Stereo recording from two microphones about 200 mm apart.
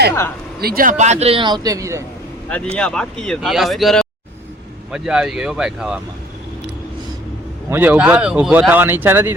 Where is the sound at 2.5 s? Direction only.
5° left (ahead or behind).